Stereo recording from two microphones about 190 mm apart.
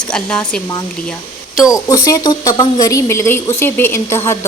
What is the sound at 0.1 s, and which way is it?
Speech, 5° left (ahead or behind).